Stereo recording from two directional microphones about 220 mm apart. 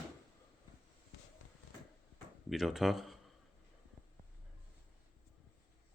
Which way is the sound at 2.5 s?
Centre (ahead or behind).